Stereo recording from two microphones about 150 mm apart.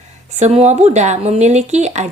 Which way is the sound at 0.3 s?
50° right (ahead or behind).